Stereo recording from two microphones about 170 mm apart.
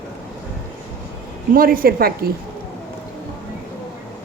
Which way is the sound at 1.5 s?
55° right (ahead or behind).